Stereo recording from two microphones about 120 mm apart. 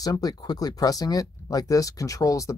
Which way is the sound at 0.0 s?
30° left (ahead or behind).